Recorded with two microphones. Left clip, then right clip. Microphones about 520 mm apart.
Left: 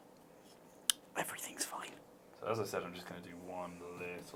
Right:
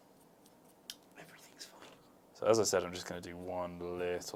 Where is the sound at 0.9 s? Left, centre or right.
Left.